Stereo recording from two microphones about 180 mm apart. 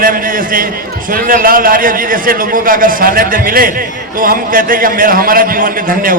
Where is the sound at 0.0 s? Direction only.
50° right (ahead or behind).